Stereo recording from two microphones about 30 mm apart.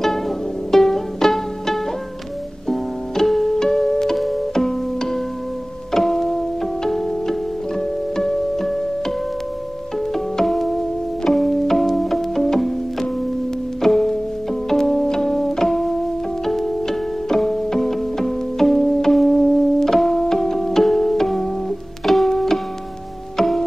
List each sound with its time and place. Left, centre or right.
0.7 s music: centre
3.5 s music: centre
10.4 s music: centre
13.7 s music: centre
16.4 s pizzicato: centre
17.7 s music: centre